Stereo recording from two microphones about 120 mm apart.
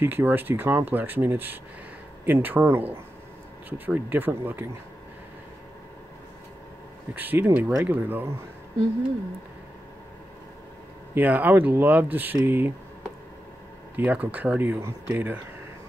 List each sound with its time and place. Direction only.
0.0 s speech: 15° right (ahead or behind)
7.2 s speech: 15° right (ahead or behind)
11.1 s speech: 15° right (ahead or behind)
13.9 s speech: 15° right (ahead or behind)